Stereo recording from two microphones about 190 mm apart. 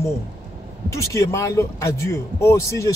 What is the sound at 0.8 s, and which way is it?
Speech, 15° left (ahead or behind).